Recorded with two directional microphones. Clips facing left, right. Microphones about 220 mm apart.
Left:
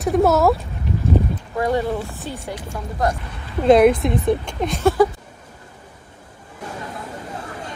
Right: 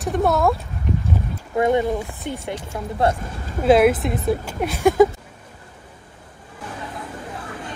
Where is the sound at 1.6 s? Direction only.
20° right (ahead or behind).